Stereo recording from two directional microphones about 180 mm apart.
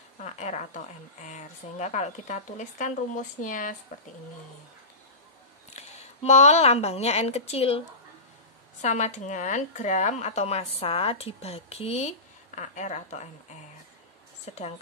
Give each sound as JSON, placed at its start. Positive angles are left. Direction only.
{"t": 0.2, "sound": "a woman's voice", "side_deg": 40}
{"t": 5.7, "sound": "speech", "side_deg": 40}
{"t": 8.8, "sound": "speech", "side_deg": 40}